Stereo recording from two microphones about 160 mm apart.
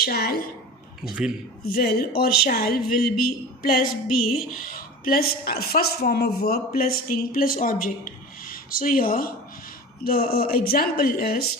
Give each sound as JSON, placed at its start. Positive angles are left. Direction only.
{"t": 0.0, "sound": "speech", "side_deg": 70}
{"t": 1.6, "sound": "a woman's voice", "side_deg": 70}